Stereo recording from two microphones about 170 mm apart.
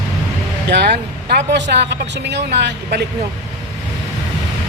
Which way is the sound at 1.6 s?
90° right.